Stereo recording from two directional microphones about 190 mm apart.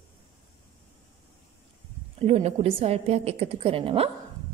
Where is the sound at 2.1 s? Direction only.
35° right (ahead or behind).